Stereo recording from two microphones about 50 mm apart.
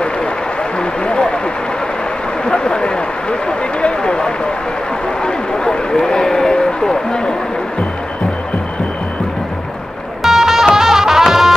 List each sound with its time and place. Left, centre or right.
0.7 s a sound: centre
2.4 s speech: centre
10.2 s music: centre